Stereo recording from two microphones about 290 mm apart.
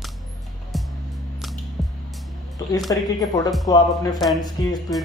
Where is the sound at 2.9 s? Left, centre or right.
Centre.